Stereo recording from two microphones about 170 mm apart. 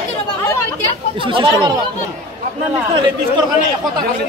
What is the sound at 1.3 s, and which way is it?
Speech, 25° right (ahead or behind).